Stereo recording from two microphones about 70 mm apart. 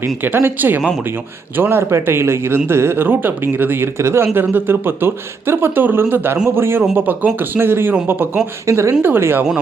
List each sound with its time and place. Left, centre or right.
0.3 s speech: right
1.9 s speech: right
8.6 s speech: right
9.0 s speech: right